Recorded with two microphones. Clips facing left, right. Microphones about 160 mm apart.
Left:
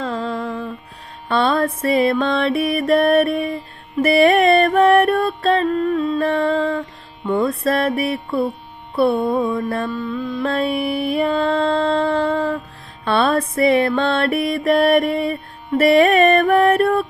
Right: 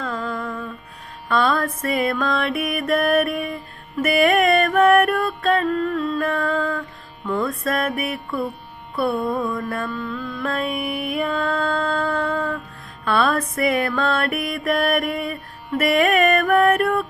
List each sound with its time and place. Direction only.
0.0 s music: 30° left (ahead or behind)
7.6 s music: 30° left (ahead or behind)
9.9 s music: 20° left (ahead or behind)